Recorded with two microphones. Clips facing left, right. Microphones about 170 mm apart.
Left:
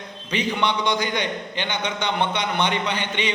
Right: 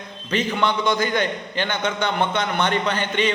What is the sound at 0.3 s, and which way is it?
A man's voice, 15° left (ahead or behind).